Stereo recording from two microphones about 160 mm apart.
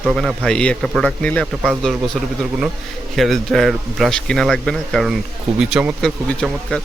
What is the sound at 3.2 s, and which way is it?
Speech, centre (ahead or behind).